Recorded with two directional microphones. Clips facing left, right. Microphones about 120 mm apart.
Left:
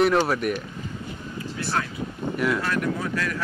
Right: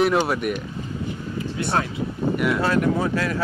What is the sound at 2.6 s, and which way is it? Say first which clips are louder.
Speech: right 6 dB; 25° right (ahead or behind).